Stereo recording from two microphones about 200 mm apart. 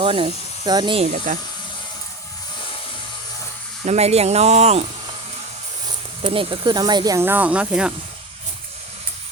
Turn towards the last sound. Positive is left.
turn(degrees=-5)  # may be behind; listen again after turning